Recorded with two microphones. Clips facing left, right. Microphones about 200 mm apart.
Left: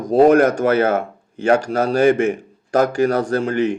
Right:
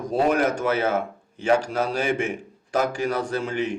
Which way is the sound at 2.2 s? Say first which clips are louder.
Left 9 dB; 40° left (ahead or behind).